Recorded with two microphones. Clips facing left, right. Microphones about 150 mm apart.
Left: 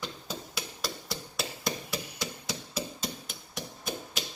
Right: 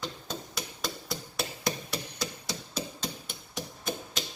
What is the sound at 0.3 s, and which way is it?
Hammer, centre (ahead or behind).